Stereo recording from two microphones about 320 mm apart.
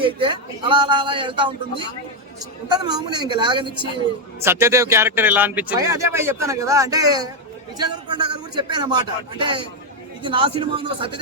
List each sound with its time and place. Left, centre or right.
0.0 s speech: centre
2.6 s speech: centre